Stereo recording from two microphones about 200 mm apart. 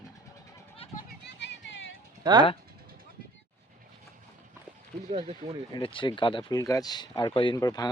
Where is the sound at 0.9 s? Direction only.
60° left (ahead or behind).